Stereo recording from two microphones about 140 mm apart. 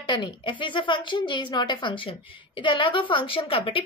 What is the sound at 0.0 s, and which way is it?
A woman's voice, 30° left (ahead or behind).